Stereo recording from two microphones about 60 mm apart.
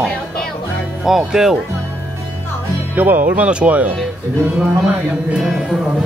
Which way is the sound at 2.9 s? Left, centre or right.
Right.